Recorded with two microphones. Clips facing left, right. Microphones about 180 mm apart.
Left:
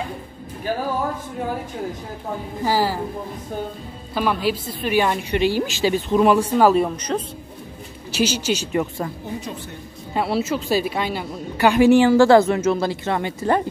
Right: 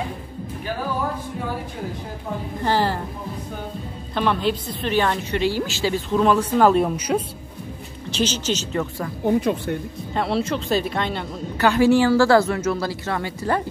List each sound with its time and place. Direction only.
2.6 s a woman's voice: 5° left (ahead or behind)
4.1 s a woman's voice: 5° left (ahead or behind)
7.0 s speech: 10° right (ahead or behind)
8.1 s a woman's voice: 10° left (ahead or behind)
9.2 s speech: 55° right (ahead or behind)
10.1 s a woman's voice: 5° left (ahead or behind); by 13.6 s 20° left (ahead or behind)